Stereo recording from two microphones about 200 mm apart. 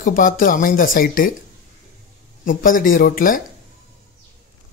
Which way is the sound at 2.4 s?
45° left (ahead or behind).